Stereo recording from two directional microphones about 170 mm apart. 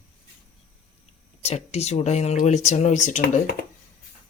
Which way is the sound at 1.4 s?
40° left (ahead or behind).